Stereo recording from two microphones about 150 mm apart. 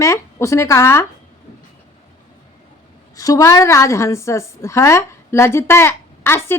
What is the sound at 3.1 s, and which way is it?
A woman's voice, 25° left (ahead or behind).